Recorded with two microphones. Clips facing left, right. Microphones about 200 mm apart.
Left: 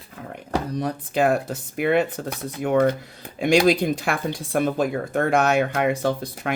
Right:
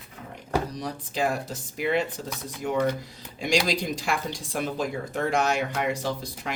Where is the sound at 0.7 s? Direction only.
55° left (ahead or behind).